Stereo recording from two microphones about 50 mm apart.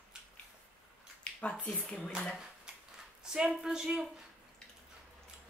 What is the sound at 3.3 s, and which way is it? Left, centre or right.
Speech, centre.